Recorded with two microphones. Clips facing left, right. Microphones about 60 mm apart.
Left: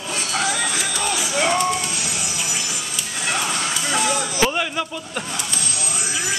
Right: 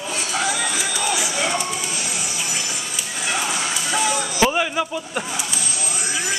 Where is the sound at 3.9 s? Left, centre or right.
Centre.